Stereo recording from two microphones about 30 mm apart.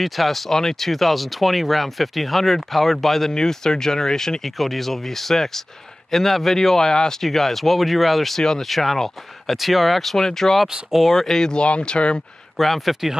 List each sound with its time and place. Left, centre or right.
0.0 s speech: centre
3.3 s speech: centre
7.2 s speech: centre
9.6 s speech: centre
11.5 s speech: left
12.6 s speech: centre